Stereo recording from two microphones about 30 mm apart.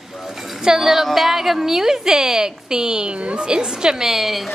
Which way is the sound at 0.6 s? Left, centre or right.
Centre.